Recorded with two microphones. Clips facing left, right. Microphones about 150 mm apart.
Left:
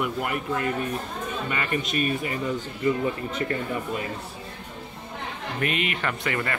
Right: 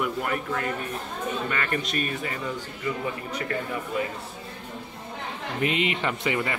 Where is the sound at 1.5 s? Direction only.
10° left (ahead or behind).